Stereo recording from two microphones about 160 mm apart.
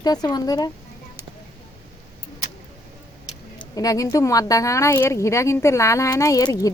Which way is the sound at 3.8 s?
20° left (ahead or behind).